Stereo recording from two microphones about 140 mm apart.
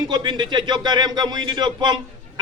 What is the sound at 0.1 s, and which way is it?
A man's voice, 30° right (ahead or behind).